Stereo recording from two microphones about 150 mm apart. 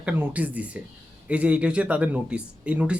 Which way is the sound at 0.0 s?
10° right (ahead or behind).